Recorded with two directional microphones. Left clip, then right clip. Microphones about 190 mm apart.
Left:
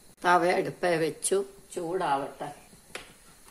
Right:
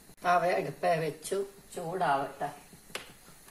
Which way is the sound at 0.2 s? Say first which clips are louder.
Left 3 dB; 55° left (ahead or behind).